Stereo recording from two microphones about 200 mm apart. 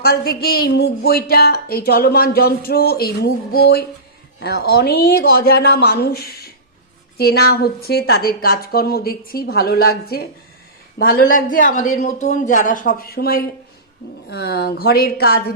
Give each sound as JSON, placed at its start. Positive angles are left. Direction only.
{"t": 0.0, "sound": "a woman's voice", "side_deg": 50}